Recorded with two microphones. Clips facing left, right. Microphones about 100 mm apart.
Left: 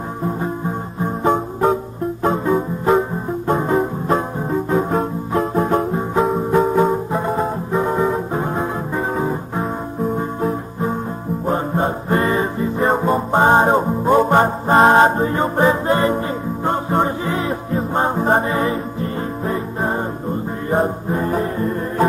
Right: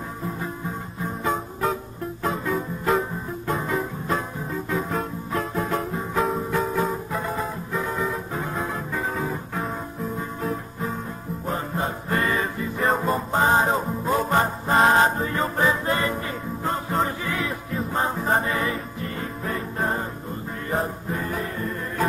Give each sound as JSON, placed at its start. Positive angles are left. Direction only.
{"t": 0.4, "sound": "music", "side_deg": 35}